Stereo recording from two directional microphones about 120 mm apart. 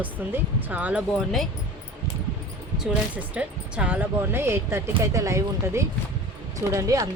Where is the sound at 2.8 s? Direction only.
10° right (ahead or behind).